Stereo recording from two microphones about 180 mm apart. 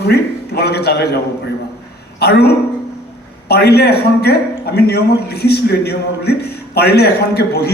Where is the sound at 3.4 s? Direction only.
65° left (ahead or behind).